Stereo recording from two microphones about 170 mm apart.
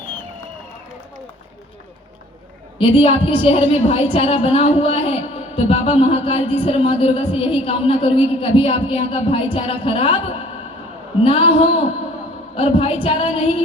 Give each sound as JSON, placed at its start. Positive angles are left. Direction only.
{"t": 2.7, "sound": "a woman's voice", "side_deg": 30}